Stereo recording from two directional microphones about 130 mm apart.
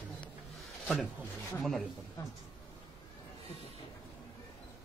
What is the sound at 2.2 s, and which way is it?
Speech, 25° left (ahead or behind).